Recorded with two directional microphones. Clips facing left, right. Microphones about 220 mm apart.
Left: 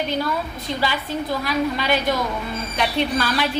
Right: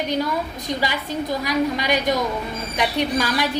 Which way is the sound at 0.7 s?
15° right (ahead or behind).